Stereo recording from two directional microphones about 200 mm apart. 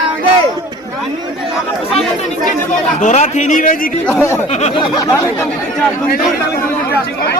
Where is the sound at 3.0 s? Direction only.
35° left (ahead or behind).